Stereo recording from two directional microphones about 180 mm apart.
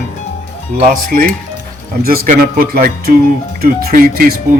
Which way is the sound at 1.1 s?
55° right (ahead or behind).